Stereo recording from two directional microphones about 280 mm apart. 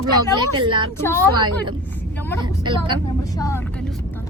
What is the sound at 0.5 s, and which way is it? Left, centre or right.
Speech, centre.